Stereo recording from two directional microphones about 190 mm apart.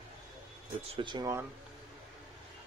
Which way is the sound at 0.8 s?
25° right (ahead or behind).